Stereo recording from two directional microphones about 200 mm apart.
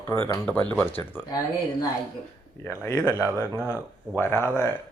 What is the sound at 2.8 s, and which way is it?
Speech, 15° left (ahead or behind).